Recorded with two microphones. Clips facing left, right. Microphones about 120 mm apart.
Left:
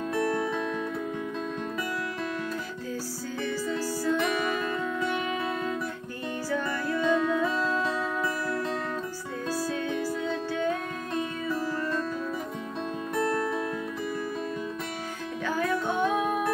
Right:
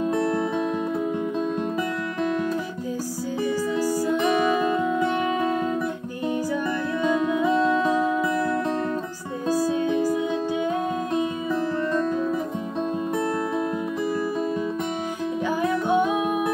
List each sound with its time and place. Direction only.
0.2 s music: 20° right (ahead or behind)
3.7 s music: 15° right (ahead or behind)
9.5 s music: 15° right (ahead or behind)
13.1 s music: 20° right (ahead or behind)
15.4 s music: 15° right (ahead or behind)